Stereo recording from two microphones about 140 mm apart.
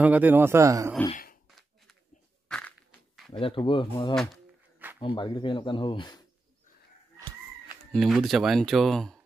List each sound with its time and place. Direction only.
0.0 s speech: 10° right (ahead or behind)
1.1 s a sound: 80° left
2.4 s a sound: 5° left (ahead or behind)
3.3 s speech: 40° left (ahead or behind)
4.1 s speech: 5° left (ahead or behind)
5.0 s speech: 35° left (ahead or behind)
7.9 s speech: centre (ahead or behind)